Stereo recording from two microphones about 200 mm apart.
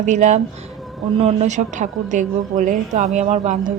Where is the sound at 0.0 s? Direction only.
35° right (ahead or behind).